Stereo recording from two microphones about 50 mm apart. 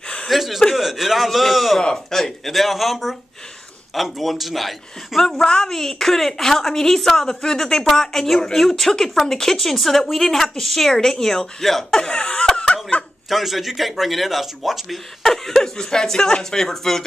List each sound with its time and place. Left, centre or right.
0.3 s a woman's voice: centre
1.8 s a woman's voice: centre
12.0 s laughter: centre
13.3 s a woman's voice: centre